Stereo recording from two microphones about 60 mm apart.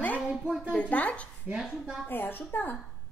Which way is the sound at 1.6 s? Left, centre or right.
Centre.